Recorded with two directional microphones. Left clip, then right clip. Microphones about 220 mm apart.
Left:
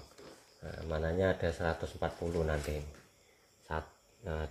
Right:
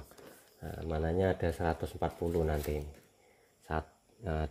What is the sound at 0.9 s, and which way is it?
Speech, 50° right (ahead or behind).